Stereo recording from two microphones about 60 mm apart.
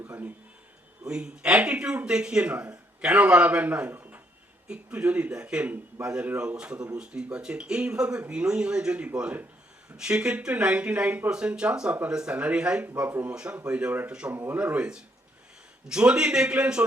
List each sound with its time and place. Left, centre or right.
0.0 s speech: right
1.0 s speech: centre
14.3 s speech: right
14.6 s speech: centre